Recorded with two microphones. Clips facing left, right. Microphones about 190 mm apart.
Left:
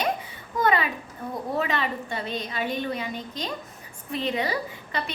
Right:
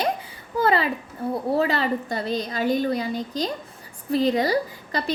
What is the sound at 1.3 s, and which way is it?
A woman's voice, 30° right (ahead or behind).